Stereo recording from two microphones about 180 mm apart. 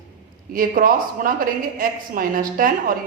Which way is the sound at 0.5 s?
50° right (ahead or behind).